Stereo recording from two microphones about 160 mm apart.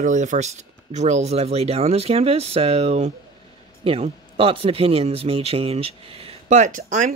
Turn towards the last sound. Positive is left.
turn(degrees=-50)  # may be behind; listen again after turning